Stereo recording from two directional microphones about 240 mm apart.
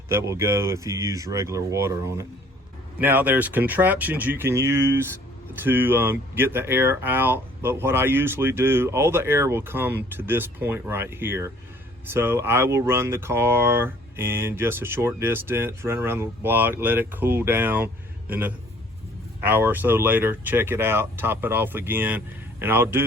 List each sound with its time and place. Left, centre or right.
0.1 s a man's voice: centre